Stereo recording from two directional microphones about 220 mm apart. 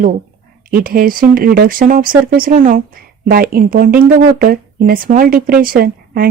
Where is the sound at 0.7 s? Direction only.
40° right (ahead or behind).